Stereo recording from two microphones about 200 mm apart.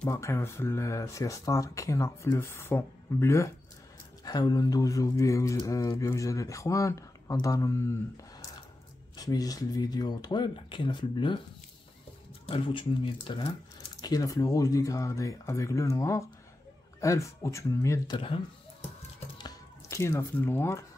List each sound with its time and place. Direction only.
0.0 s speech: 15° left (ahead or behind)
12.4 s speech: 25° left (ahead or behind)